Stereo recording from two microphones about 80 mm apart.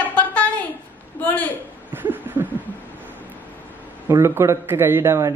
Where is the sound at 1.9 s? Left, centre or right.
Right.